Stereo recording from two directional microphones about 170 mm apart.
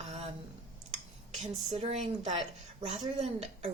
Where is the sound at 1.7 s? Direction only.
40° right (ahead or behind).